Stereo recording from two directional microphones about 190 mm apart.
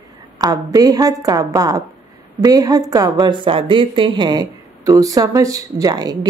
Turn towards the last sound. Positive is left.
turn(degrees=-20)  # may be behind; listen again after turning